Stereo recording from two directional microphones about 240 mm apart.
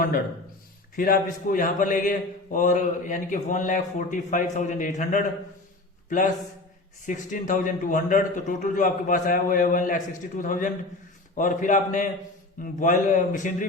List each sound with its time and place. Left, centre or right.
0.9 s a man's voice: left